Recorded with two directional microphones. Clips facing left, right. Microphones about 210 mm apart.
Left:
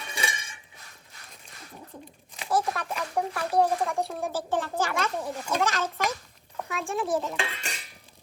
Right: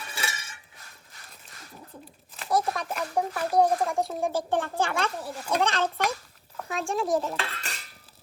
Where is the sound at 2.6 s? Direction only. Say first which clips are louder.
Right 1 dB; centre (ahead or behind).